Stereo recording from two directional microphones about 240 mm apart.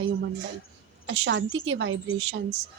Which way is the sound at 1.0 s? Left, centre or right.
Right.